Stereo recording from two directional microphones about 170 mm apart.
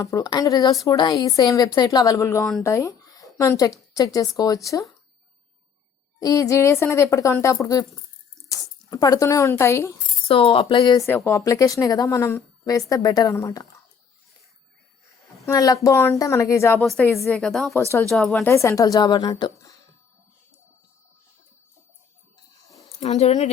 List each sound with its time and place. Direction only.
0.0 s a woman's voice: 20° left (ahead or behind)
6.1 s a woman's voice: 20° left (ahead or behind)
10.2 s speech: 35° left (ahead or behind)
15.4 s a woman's voice: 20° left (ahead or behind)
17.3 s a woman's voice: 5° left (ahead or behind)
18.5 s speech: 15° left (ahead or behind)
23.0 s a woman's voice: 40° left (ahead or behind)